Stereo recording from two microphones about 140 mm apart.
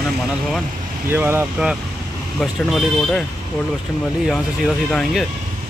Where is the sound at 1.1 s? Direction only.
15° right (ahead or behind).